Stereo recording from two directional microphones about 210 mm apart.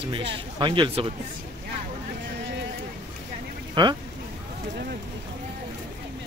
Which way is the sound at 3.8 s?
20° right (ahead or behind).